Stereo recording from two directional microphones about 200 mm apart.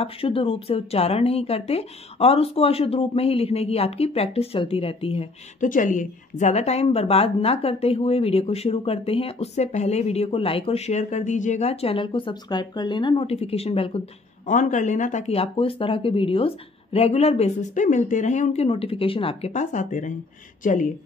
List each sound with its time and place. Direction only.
0.0 s speech: 30° left (ahead or behind)
5.7 s a woman's voice: 40° left (ahead or behind)
14.4 s a woman's voice: 40° left (ahead or behind)